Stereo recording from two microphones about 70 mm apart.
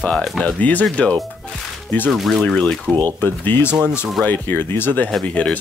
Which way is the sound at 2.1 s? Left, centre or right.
Centre.